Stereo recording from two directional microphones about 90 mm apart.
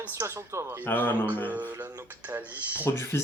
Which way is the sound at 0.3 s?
30° right (ahead or behind).